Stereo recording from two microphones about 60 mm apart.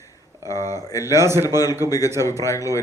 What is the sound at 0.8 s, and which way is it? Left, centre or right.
Speech, left.